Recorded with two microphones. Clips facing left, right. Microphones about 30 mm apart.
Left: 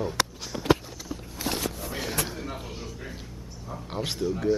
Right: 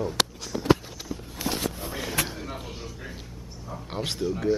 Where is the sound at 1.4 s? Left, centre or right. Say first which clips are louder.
Right 1 dB; right.